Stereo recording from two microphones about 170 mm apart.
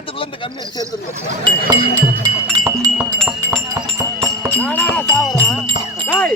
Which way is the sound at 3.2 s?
5° left (ahead or behind).